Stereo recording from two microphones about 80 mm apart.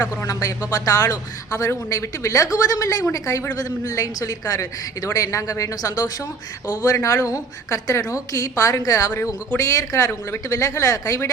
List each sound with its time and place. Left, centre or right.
0.2 s speech: left